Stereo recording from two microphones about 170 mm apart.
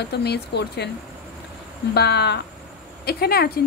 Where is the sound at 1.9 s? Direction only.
75° left (ahead or behind).